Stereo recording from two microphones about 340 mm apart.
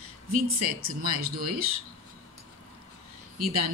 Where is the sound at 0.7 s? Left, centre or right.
Right.